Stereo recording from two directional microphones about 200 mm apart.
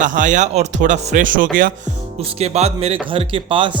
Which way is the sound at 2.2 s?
30° right (ahead or behind).